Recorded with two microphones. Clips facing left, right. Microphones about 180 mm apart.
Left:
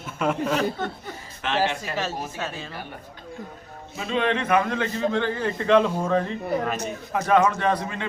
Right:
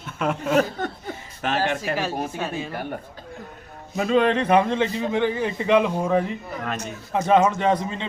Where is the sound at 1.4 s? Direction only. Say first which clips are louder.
Right 1 dB; 50° right (ahead or behind).